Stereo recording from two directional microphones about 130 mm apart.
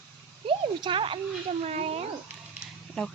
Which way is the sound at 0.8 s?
40° right (ahead or behind).